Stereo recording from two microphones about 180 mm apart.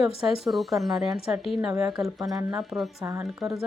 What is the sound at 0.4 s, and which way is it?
A woman's voice, centre (ahead or behind).